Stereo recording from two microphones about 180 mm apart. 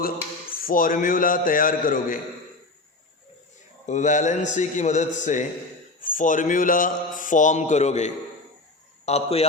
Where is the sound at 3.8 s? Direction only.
40° left (ahead or behind).